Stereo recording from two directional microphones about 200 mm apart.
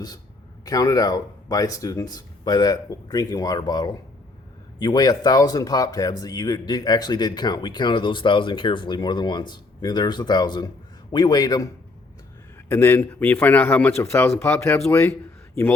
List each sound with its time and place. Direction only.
0.6 s a man's voice: 15° left (ahead or behind)